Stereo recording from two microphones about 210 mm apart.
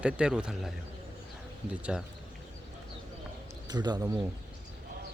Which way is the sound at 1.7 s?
5° right (ahead or behind).